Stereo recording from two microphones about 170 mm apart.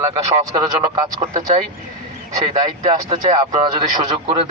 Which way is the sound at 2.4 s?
35° right (ahead or behind).